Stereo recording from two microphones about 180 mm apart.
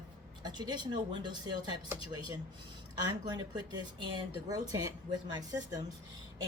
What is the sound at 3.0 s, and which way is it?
Speech, 25° right (ahead or behind).